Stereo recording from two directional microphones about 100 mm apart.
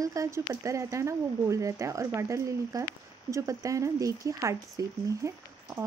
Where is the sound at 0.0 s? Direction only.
30° right (ahead or behind).